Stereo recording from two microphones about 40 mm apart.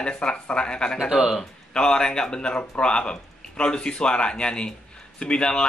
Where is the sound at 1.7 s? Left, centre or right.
Left.